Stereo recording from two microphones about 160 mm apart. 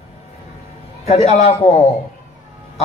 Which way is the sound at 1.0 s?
40° left (ahead or behind).